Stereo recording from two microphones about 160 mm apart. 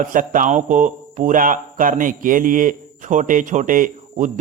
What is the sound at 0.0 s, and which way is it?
A man's voice, 55° right (ahead or behind).